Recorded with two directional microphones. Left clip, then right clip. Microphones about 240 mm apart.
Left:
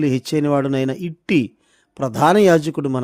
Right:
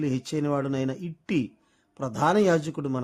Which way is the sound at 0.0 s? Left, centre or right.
Left.